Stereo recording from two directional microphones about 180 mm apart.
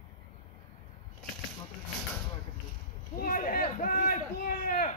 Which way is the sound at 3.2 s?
50° left (ahead or behind).